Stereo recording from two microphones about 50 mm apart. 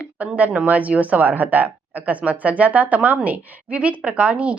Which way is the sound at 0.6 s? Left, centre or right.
Right.